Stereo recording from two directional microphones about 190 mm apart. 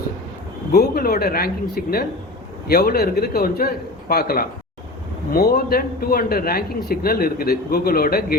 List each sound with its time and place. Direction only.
0.7 s a man's voice: 55° left (ahead or behind)